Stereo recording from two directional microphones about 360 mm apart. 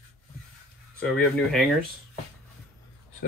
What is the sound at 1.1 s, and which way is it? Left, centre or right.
Speech, centre.